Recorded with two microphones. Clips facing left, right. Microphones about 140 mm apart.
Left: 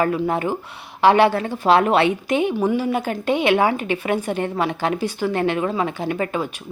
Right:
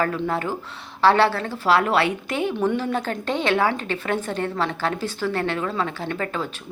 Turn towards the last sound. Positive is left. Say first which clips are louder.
# left 4 dB
turn(degrees=15)  # may be behind; listen again after turning